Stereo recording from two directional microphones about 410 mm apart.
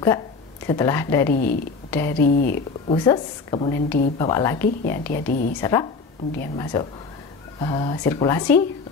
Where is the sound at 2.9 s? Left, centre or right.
Centre.